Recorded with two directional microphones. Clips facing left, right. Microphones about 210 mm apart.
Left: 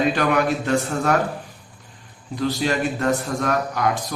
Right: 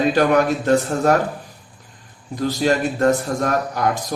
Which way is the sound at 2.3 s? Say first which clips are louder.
Right 3 dB; 45° right (ahead or behind).